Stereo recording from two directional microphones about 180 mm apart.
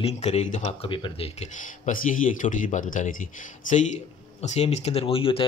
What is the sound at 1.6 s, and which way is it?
Speech, 45° left (ahead or behind).